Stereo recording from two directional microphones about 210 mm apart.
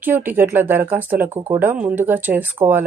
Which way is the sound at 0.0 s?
10° right (ahead or behind).